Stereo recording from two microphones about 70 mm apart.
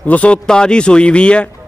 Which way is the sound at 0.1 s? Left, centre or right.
Centre.